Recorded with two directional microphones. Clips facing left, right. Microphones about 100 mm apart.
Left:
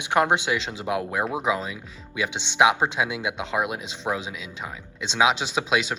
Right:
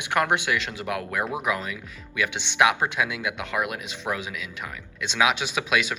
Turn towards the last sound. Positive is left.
turn(degrees=20)  # may be behind; listen again after turning